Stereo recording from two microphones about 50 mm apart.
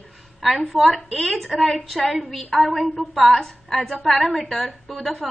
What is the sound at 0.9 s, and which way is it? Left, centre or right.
Speech, centre.